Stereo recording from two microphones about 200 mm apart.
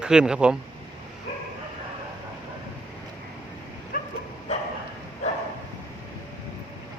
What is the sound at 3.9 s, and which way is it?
Bow-wow, 45° left (ahead or behind).